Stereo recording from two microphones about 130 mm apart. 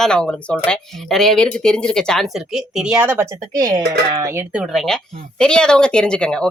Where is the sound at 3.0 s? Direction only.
15° right (ahead or behind).